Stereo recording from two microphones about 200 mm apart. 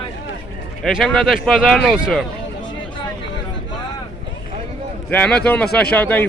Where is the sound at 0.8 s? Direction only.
Centre (ahead or behind).